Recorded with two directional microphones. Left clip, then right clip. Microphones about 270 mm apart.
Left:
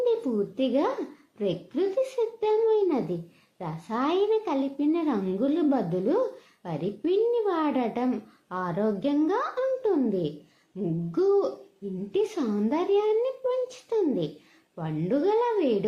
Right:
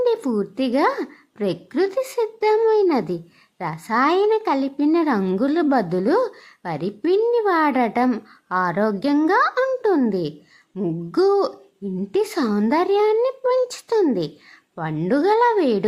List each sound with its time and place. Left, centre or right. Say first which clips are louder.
0.0 s a woman's voice: right 5 dB; right